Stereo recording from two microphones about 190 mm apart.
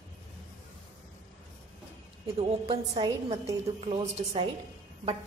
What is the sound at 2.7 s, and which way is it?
A woman's voice, 30° right (ahead or behind).